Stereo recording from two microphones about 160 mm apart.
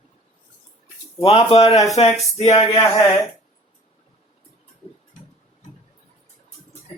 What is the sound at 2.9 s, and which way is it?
Speech, 20° left (ahead or behind).